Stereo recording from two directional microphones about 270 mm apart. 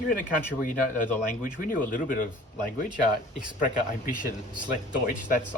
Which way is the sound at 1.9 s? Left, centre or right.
Left.